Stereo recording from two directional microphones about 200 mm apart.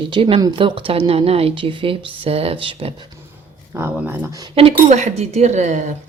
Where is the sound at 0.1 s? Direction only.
25° right (ahead or behind).